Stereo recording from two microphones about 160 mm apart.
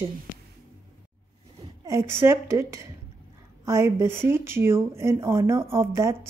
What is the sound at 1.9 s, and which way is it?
Speech, 15° right (ahead or behind).